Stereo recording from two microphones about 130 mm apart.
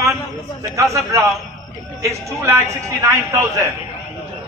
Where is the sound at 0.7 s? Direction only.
25° right (ahead or behind).